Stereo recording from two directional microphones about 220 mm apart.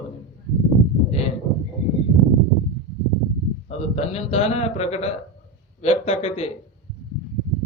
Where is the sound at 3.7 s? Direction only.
30° left (ahead or behind).